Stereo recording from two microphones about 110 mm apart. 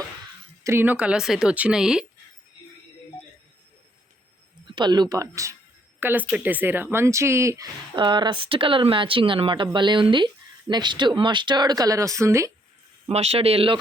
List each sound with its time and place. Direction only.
0.6 s speech: 20° right (ahead or behind); by 2.0 s 5° right (ahead or behind)
4.7 s speech: 40° right (ahead or behind)
6.0 s speech: 20° right (ahead or behind)
7.9 s speech: 45° right (ahead or behind); by 12.5 s 25° right (ahead or behind)
13.1 s speech: 65° right (ahead or behind)